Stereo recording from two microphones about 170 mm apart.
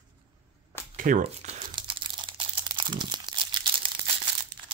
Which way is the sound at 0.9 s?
50° right (ahead or behind).